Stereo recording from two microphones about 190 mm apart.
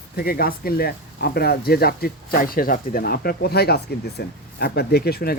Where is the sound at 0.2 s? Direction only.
50° left (ahead or behind).